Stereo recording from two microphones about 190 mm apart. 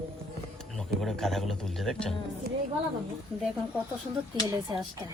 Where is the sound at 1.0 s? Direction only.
Centre (ahead or behind).